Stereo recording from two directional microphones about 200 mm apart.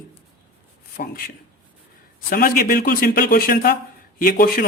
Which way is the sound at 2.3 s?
45° left (ahead or behind).